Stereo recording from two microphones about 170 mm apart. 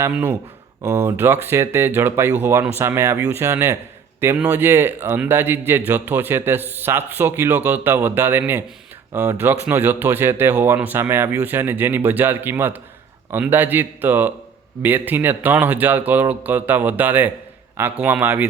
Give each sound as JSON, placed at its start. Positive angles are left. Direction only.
{"t": 0.0, "sound": "a man's voice", "side_deg": -10}